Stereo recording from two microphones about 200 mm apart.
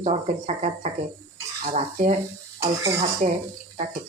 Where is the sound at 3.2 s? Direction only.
40° right (ahead or behind).